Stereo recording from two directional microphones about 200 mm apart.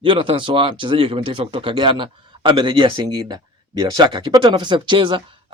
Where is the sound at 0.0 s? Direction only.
25° right (ahead or behind).